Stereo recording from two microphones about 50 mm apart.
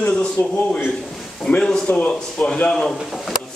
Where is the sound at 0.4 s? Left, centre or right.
Left.